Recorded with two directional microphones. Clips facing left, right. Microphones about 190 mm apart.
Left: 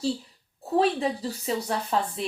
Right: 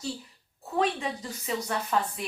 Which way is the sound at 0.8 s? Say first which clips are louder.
Left 4 dB; 35° left (ahead or behind).